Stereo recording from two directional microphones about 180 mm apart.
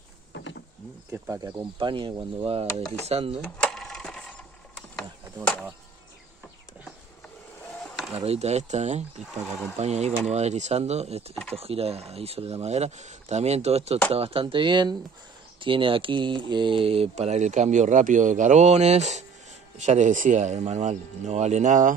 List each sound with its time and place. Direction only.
0.3 s power windows: 85° left
1.1 s speech: 15° right (ahead or behind); by 3.3 s 35° right (ahead or behind)
3.5 s a sound: 5° left (ahead or behind)
8.1 s speech: 35° right (ahead or behind)